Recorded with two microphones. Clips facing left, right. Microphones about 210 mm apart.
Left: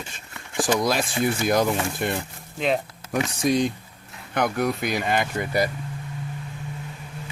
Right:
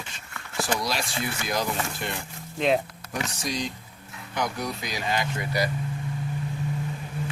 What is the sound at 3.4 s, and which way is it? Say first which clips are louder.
Speech: left 9 dB; 55° left (ahead or behind).